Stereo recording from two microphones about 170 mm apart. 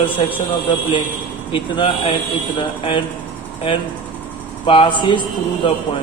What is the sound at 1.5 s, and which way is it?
Speech, 35° left (ahead or behind).